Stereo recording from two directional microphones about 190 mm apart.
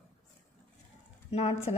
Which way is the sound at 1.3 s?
35° left (ahead or behind).